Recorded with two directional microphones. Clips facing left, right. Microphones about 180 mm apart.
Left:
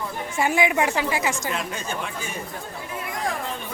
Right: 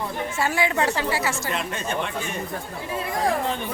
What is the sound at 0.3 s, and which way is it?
A woman's voice, 15° left (ahead or behind).